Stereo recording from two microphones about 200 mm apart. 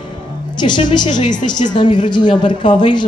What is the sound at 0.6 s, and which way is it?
A woman's voice, 25° left (ahead or behind).